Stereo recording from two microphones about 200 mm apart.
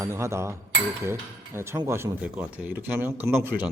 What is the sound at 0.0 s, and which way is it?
Speech, 15° right (ahead or behind).